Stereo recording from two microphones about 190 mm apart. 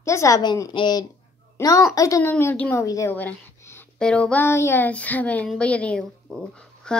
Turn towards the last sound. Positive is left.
turn(degrees=5)  # may be behind; listen again after turning